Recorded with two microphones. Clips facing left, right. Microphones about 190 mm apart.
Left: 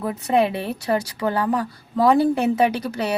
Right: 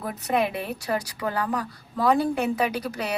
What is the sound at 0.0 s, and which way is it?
A woman's voice, 30° left (ahead or behind).